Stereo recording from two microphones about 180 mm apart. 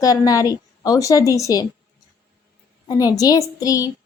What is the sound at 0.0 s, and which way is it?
Speech, 20° left (ahead or behind).